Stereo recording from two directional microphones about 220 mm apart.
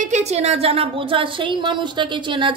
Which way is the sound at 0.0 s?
30° right (ahead or behind).